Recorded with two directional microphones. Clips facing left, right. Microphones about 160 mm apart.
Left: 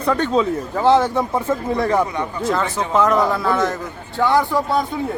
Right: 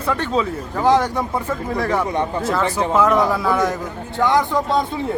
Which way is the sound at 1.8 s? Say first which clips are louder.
Left 2 dB; 30° left (ahead or behind).